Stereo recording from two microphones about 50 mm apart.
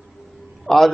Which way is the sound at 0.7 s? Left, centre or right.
Centre.